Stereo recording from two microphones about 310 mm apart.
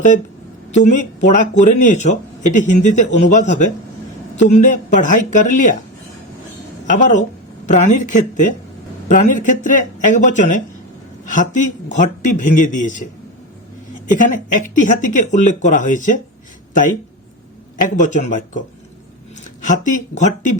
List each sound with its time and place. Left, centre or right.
0.9 s speech: left
6.9 s speech: left
14.2 s speech: left
17.7 s speech: left
19.6 s speech: left